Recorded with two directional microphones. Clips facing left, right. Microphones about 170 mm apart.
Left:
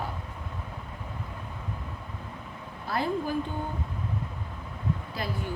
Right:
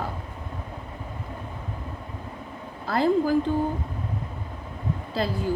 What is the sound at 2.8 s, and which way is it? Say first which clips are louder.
Speech: right 7 dB; 90° right.